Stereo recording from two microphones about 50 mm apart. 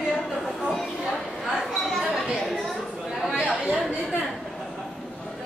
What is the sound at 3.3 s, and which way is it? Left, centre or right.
Chatter, centre.